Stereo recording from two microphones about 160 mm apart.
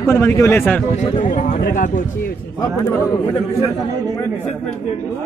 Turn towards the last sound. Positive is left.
turn(degrees=15)  # may be behind; listen again after turning